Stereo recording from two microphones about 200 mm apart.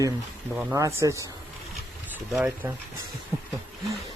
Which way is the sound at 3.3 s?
15° right (ahead or behind).